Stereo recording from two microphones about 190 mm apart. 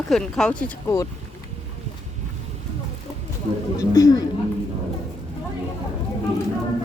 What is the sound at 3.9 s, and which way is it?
Speech, 15° left (ahead or behind).